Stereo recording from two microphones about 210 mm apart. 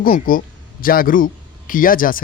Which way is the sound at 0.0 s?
40° left (ahead or behind).